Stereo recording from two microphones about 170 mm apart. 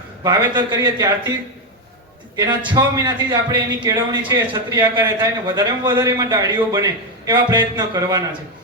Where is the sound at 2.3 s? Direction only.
20° right (ahead or behind).